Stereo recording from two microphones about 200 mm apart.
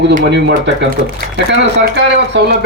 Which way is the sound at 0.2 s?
60° right (ahead or behind).